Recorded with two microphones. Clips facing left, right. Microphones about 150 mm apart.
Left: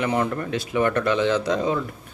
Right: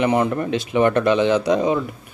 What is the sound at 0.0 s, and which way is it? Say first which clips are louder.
A man's voice: right 5 dB; 20° right (ahead or behind).